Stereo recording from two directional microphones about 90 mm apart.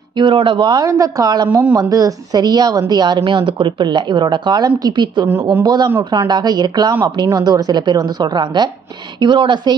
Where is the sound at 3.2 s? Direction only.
65° right (ahead or behind).